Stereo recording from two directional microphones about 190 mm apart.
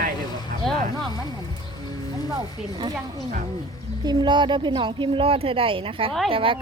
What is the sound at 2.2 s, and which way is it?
Speech, 20° right (ahead or behind).